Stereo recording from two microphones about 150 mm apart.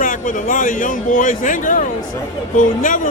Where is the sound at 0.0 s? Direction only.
60° left (ahead or behind).